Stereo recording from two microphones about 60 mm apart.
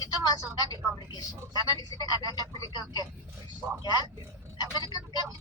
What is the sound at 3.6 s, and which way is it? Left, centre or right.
Speech, right.